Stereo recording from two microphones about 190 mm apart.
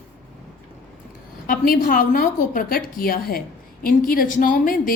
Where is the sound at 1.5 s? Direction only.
50° left (ahead or behind).